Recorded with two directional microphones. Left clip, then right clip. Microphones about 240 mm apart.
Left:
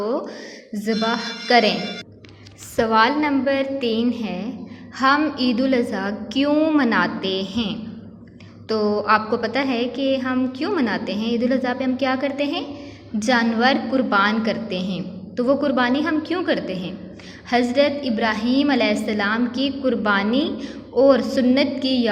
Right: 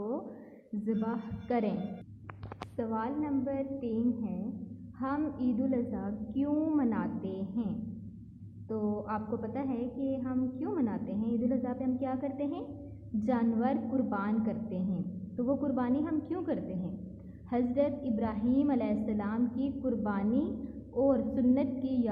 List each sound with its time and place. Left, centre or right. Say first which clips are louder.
0.9 s a woman's voice: left 14 dB; centre
2.7 s a woman's voice: left 18 dB; left
8.6 s a sound: left 15 dB; left
9.0 s a woman's voice: left 18 dB; centre